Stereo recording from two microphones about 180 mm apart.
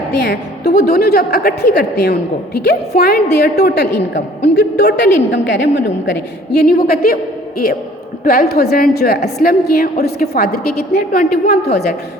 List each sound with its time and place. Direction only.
0.2 s a woman's voice: 65° left (ahead or behind)
8.2 s a woman's voice: 55° left (ahead or behind)